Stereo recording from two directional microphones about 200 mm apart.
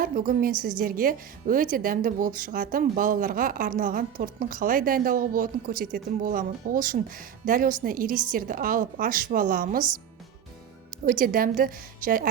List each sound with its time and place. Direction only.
0.0 s a woman's voice: 45° right (ahead or behind)
11.0 s a woman's voice: 45° right (ahead or behind)